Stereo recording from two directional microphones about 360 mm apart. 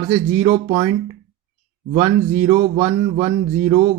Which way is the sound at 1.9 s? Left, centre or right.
Centre.